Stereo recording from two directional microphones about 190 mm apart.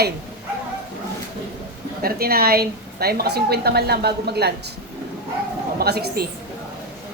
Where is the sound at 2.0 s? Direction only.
55° right (ahead or behind).